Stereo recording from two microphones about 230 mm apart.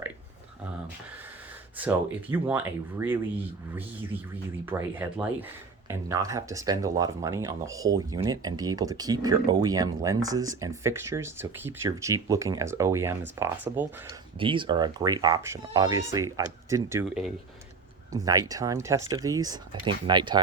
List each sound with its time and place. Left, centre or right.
1.8 s speech: centre
14.3 s speech: right